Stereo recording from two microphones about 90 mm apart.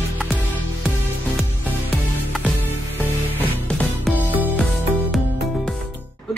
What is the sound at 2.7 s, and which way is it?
Music, 20° left (ahead or behind).